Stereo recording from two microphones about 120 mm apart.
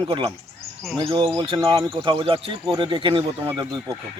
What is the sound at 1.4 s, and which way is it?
Speech, 40° right (ahead or behind).